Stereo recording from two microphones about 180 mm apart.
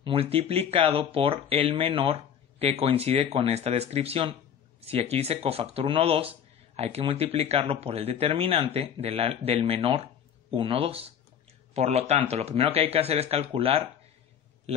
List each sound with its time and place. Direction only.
0.0 s speech: 30° right (ahead or behind)